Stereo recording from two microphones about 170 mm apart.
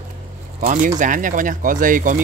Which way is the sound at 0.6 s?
50° right (ahead or behind).